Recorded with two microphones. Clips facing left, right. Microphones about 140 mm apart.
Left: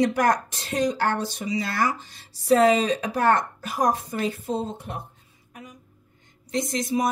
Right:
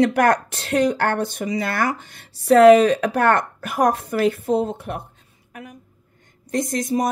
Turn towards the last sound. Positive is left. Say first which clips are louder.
# right 3 dB
turn(degrees=-45)  # may be behind; listen again after turning